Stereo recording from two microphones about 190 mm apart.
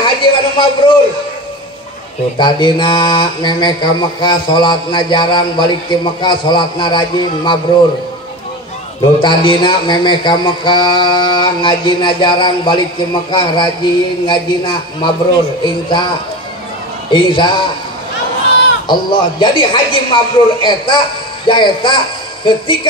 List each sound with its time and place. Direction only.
0.0 s a sound: 25° left (ahead or behind)
2.3 s speech: 25° left (ahead or behind)
9.2 s speech: 25° left (ahead or behind)
17.1 s speech: 25° left (ahead or behind)
18.9 s speech: 25° left (ahead or behind)